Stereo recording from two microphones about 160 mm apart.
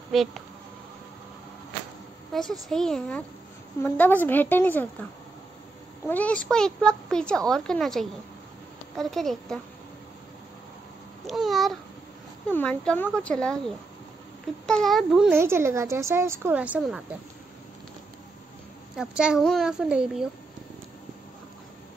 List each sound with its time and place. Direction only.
0.1 s speech: centre (ahead or behind)
2.3 s a child's voice: centre (ahead or behind)
6.0 s a child's voice: 10° left (ahead or behind)
11.2 s babbling: centre (ahead or behind)
12.4 s a child's voice: 10° left (ahead or behind)
15.3 s a woman's voice: 15° right (ahead or behind)
18.9 s a child's voice: 5° right (ahead or behind)